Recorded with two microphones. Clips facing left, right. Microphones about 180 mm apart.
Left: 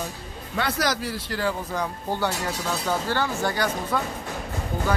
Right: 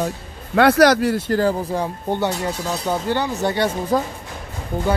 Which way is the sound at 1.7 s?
25° right (ahead or behind).